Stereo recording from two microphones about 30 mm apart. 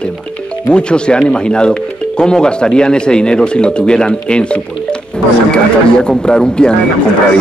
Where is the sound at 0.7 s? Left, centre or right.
Left.